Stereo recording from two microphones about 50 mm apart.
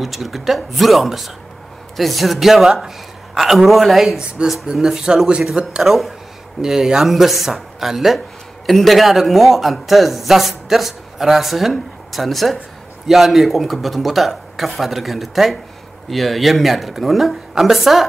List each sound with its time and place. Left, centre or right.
0.0 s a man's voice: centre
4.4 s speech: centre
5.8 s a man's voice: centre